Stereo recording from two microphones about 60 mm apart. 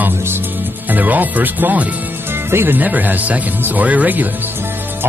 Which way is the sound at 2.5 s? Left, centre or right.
Right.